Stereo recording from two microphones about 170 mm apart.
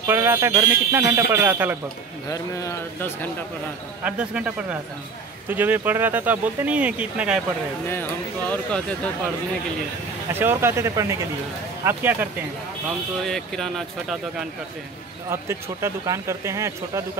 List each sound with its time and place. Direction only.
0.0 s speech: 15° right (ahead or behind)
2.2 s a man's voice: 20° left (ahead or behind)
4.0 s speech: 5° right (ahead or behind)
7.9 s a man's voice: 10° left (ahead or behind)
10.4 s speech: 15° right (ahead or behind)
13.2 s speech: centre (ahead or behind)
15.2 s speech: 15° right (ahead or behind)